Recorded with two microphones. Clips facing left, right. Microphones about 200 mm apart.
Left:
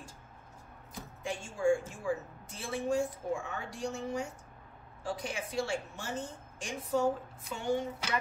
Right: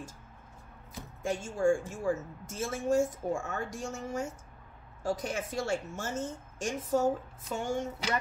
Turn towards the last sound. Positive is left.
turn(degrees=-45)  # may be behind; listen again after turning